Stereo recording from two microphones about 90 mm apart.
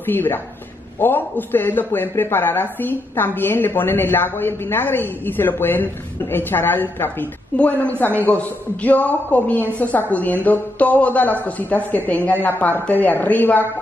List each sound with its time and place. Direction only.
0.0 s a woman's voice: 25° left (ahead or behind)